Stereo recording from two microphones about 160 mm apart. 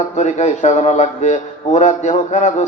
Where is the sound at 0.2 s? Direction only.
50° left (ahead or behind).